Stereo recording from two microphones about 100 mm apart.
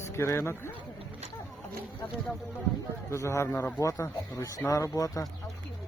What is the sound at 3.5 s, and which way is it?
Speech, 20° left (ahead or behind).